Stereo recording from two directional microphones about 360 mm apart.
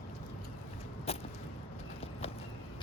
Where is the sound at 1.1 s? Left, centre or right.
Centre.